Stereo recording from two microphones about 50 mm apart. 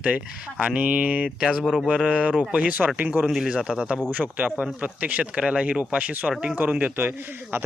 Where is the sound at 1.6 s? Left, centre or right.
Centre.